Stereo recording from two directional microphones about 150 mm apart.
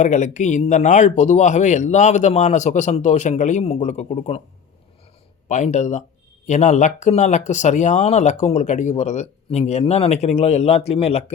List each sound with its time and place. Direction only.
0.0 s speech: 55° left (ahead or behind)
5.5 s speech: 50° left (ahead or behind)